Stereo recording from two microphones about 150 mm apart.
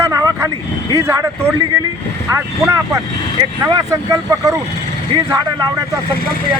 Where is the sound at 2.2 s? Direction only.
20° right (ahead or behind).